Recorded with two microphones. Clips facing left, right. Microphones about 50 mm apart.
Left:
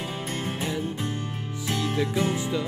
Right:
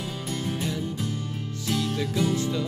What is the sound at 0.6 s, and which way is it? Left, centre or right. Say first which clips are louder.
Music: left 1 dB; left.